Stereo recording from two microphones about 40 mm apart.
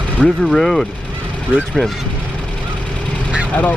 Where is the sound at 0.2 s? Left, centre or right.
Centre.